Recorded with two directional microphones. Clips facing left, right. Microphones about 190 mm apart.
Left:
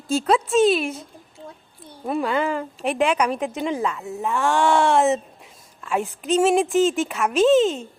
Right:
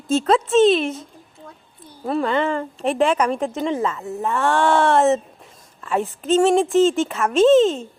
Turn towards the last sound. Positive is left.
turn(degrees=0)  # may be behind; listen again after turning